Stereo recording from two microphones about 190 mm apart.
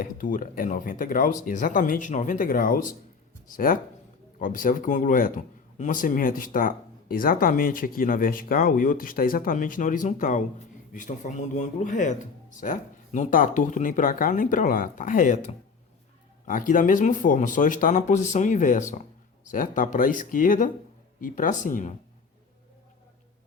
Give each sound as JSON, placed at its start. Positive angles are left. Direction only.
{"t": 0.0, "sound": "speech", "side_deg": 45}